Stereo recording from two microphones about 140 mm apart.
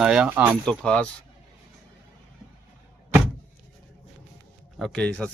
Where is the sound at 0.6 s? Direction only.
5° left (ahead or behind).